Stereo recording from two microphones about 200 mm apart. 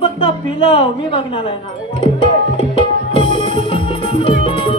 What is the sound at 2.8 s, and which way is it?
Music, 25° left (ahead or behind).